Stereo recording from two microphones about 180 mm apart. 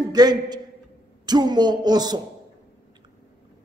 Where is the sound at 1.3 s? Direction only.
25° right (ahead or behind).